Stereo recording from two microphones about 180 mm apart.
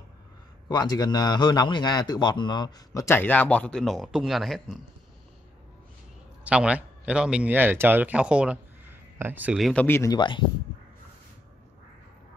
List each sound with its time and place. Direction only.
0.7 s a man's voice: 20° left (ahead or behind); by 4.7 s centre (ahead or behind)
6.4 s a man's voice: 5° right (ahead or behind)
9.8 s speech: 15° left (ahead or behind)
10.1 s a man's voice: 25° left (ahead or behind)